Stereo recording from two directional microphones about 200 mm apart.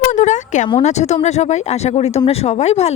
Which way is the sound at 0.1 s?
35° left (ahead or behind).